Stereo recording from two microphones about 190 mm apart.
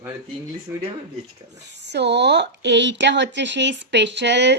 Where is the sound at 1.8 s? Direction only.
65° right (ahead or behind).